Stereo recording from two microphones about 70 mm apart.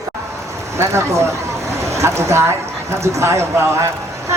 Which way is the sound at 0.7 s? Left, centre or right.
Right.